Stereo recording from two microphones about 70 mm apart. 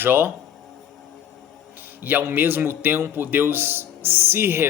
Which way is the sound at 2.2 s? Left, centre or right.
Right.